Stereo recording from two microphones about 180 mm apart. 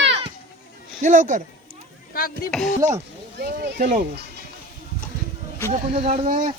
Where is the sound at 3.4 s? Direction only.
60° right (ahead or behind).